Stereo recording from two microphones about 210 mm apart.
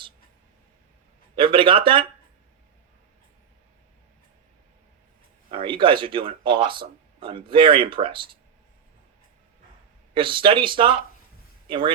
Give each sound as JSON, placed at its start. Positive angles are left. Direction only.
{"t": 1.4, "sound": "speech", "side_deg": -25}
{"t": 5.5, "sound": "speech", "side_deg": -25}
{"t": 10.2, "sound": "speech", "side_deg": -25}